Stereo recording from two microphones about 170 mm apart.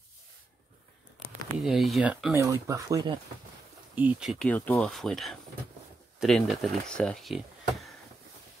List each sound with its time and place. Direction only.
1.6 s speech: centre (ahead or behind)
2.3 s speech: 20° right (ahead or behind)
3.9 s speech: 10° right (ahead or behind)
4.5 s speech: 10° left (ahead or behind)